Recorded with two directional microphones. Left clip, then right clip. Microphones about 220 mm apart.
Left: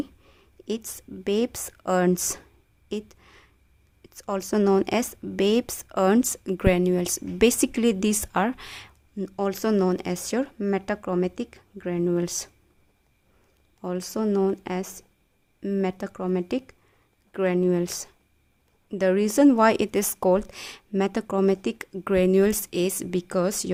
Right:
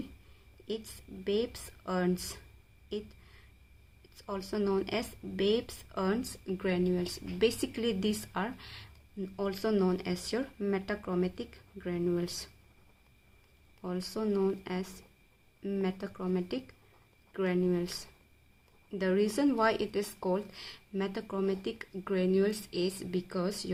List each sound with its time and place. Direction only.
0.9 s speech: 50° left (ahead or behind)
2.9 s a sound: 50° left (ahead or behind)
4.1 s speech: 50° left (ahead or behind)
13.8 s speech: 45° left (ahead or behind)